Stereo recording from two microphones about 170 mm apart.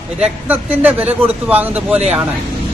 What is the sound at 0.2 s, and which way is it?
A man's voice, 10° right (ahead or behind).